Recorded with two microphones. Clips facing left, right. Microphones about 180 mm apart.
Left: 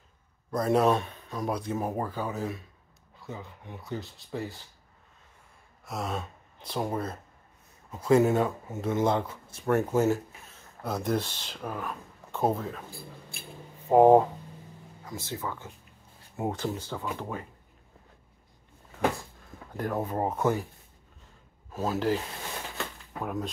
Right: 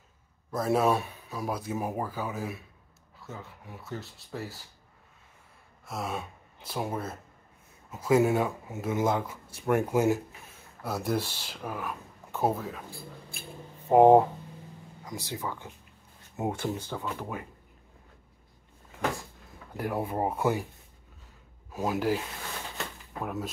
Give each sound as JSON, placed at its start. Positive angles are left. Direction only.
{"t": 0.5, "sound": "speech", "side_deg": -5}
{"t": 5.9, "sound": "speech", "side_deg": 0}
{"t": 13.8, "sound": "speech", "side_deg": -15}
{"t": 19.8, "sound": "speech", "side_deg": -10}
{"t": 21.7, "sound": "speech", "side_deg": -10}
{"t": 23.2, "sound": "speech", "side_deg": -5}